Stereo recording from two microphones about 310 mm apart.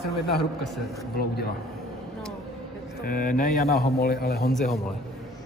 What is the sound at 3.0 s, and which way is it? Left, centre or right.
A man's voice, left.